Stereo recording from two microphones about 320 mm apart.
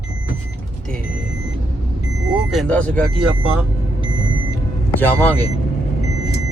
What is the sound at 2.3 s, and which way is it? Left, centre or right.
Speech, centre.